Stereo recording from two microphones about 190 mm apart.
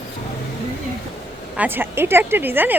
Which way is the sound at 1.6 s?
10° right (ahead or behind).